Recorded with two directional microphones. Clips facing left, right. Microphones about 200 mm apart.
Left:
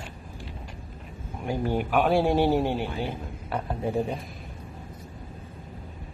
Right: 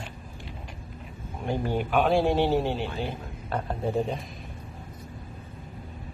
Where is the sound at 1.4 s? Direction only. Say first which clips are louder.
Left 1 dB; 10° left (ahead or behind).